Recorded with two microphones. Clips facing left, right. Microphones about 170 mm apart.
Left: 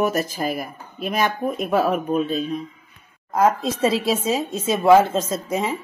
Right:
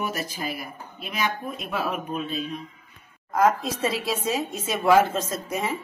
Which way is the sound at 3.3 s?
25° left (ahead or behind).